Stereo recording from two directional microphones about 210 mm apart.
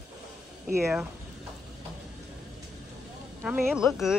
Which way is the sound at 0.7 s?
15° right (ahead or behind).